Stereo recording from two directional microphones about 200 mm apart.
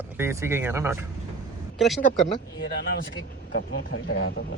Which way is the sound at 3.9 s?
75° left (ahead or behind).